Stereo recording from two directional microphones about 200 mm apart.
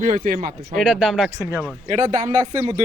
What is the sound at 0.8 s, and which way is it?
Speech, 5° right (ahead or behind).